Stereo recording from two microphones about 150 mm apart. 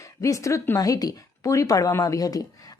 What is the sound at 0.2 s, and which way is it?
Speech, 20° left (ahead or behind).